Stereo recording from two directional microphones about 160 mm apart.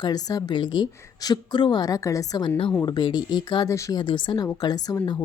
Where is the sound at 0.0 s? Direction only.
25° left (ahead or behind).